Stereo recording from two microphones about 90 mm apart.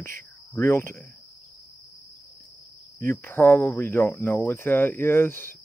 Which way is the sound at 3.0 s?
20° left (ahead or behind).